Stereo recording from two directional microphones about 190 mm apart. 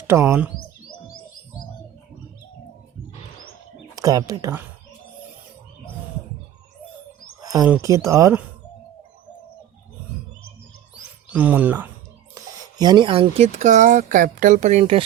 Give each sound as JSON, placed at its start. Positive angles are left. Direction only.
{"t": 0.1, "sound": "speech", "side_deg": -15}
{"t": 3.9, "sound": "speech", "side_deg": -20}
{"t": 7.4, "sound": "a sound", "side_deg": -20}
{"t": 7.7, "sound": "speech", "side_deg": -15}
{"t": 11.4, "sound": "speech", "side_deg": -10}
{"t": 12.3, "sound": "speech", "side_deg": -20}